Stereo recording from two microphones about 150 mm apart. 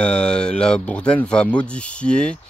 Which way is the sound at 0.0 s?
5° left (ahead or behind).